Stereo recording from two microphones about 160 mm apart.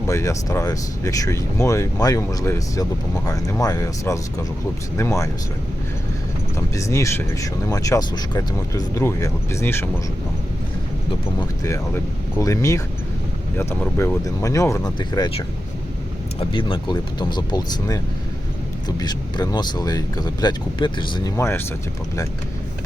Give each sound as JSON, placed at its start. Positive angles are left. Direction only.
{"t": 0.1, "sound": "speech", "side_deg": 20}
{"t": 6.7, "sound": "speech", "side_deg": 20}
{"t": 11.3, "sound": "speech", "side_deg": 20}
{"t": 16.4, "sound": "speech", "side_deg": 30}
{"t": 21.3, "sound": "speech", "side_deg": 15}